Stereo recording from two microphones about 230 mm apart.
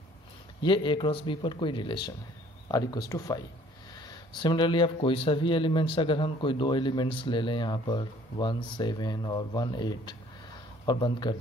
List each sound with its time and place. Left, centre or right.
0.6 s speech: left